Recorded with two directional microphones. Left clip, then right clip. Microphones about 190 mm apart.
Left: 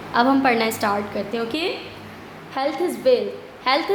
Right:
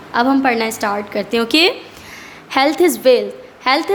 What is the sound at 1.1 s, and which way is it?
A woman's voice, 40° right (ahead or behind).